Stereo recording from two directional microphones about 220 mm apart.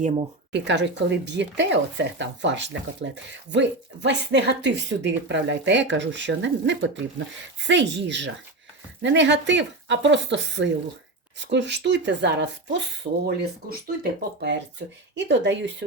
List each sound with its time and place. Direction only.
0.5 s speech: 50° right (ahead or behind)